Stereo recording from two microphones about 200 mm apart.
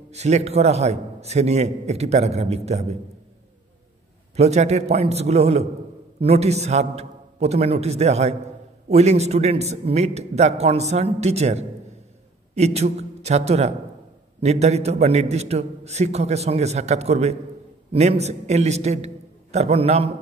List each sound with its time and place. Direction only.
0.1 s a man's voice: 35° right (ahead or behind)
4.4 s a man's voice: 35° right (ahead or behind)